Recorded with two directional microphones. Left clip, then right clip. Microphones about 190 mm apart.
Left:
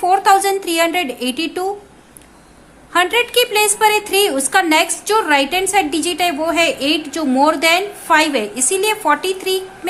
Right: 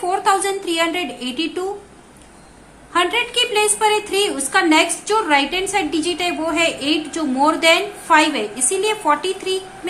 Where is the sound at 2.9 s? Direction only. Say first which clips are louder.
Left 3 dB; 40° left (ahead or behind).